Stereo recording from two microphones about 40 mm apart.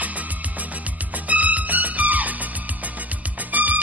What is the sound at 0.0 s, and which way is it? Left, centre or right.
Music, right.